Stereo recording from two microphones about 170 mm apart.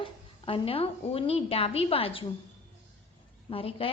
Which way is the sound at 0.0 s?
30° left (ahead or behind).